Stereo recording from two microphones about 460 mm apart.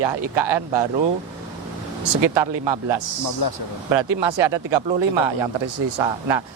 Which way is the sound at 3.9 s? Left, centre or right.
Right.